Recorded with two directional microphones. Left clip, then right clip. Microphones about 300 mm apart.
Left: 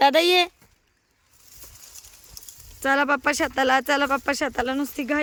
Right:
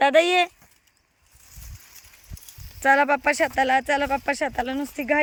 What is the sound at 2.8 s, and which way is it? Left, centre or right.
Speech, centre.